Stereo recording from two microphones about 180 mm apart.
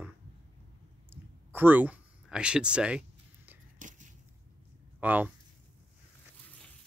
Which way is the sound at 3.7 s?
45° right (ahead or behind).